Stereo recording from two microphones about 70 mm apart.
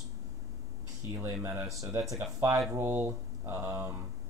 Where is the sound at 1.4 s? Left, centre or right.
Right.